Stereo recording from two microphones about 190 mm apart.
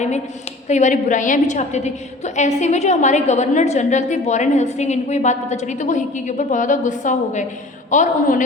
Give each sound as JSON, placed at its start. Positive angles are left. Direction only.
{"t": 0.7, "sound": "a woman's voice", "side_deg": 40}